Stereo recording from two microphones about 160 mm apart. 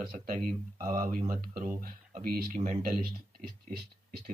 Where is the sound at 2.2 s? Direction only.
70° right (ahead or behind).